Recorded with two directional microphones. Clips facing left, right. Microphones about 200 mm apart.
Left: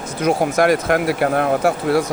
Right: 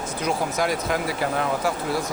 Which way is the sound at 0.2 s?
55° left (ahead or behind).